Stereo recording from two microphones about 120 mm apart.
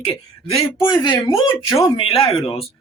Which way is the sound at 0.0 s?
45° left (ahead or behind).